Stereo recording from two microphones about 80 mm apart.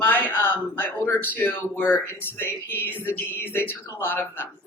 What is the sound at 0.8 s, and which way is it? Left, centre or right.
Speech, left.